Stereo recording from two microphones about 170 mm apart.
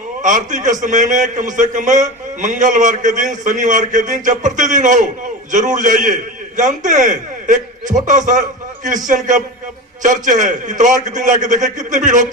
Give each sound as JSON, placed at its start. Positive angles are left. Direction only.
{"t": 0.2, "sound": "a man's voice", "side_deg": -50}